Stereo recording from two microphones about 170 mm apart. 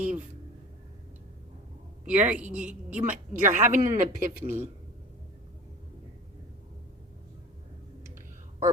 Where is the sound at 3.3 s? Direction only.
50° right (ahead or behind).